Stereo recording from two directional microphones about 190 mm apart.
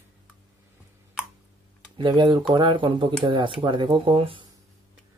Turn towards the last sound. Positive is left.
turn(degrees=-30)  # may be behind; listen again after turning